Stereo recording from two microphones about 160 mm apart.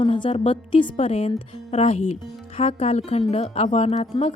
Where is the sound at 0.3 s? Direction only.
35° left (ahead or behind).